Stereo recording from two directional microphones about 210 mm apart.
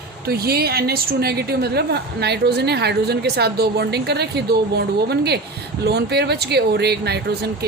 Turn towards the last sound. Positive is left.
turn(degrees=-50)  # may be behind; listen again after turning